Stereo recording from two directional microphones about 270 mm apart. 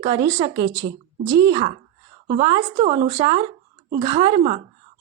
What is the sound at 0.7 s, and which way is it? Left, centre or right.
A woman's voice, centre.